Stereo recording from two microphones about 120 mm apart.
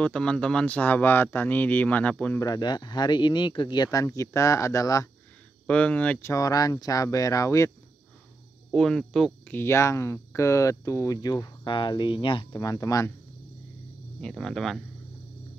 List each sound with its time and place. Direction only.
0.0 s speech: 10° left (ahead or behind)
2.4 s speech: 35° left (ahead or behind)
5.7 s speech: 10° left (ahead or behind)
6.3 s speech: 30° left (ahead or behind)
8.7 s speech: 5° left (ahead or behind)
9.5 s speech: 20° left (ahead or behind); by 12.4 s 45° left (ahead or behind)
12.5 s speech: 30° left (ahead or behind)
14.2 s speech: 5° left (ahead or behind)